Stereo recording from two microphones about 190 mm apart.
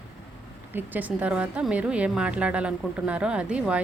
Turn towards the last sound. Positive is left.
turn(degrees=-5)  # may be behind; listen again after turning